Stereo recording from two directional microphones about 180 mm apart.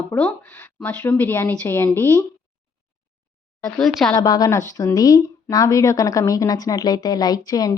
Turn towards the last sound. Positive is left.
turn(degrees=20)  # may be behind; listen again after turning